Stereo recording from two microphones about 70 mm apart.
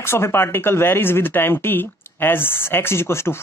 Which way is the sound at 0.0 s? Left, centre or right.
Left.